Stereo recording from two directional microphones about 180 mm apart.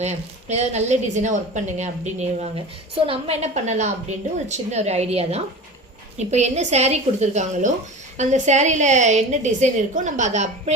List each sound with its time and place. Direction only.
0.0 s a woman's voice: 40° right (ahead or behind)